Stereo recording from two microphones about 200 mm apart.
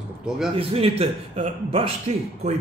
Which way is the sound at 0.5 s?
30° right (ahead or behind).